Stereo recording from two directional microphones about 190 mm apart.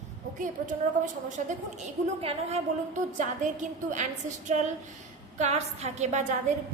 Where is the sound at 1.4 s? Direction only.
40° right (ahead or behind).